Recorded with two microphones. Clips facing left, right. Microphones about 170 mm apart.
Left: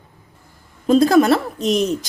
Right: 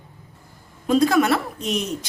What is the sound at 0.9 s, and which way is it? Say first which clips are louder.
A woman's voice: left 5 dB; 35° left (ahead or behind).